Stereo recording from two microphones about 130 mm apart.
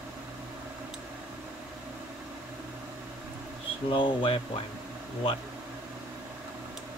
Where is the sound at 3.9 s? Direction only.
40° left (ahead or behind).